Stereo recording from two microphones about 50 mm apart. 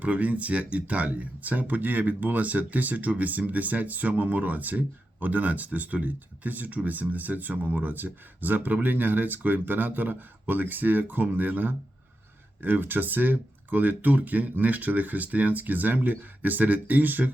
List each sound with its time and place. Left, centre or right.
0.0 s speech: right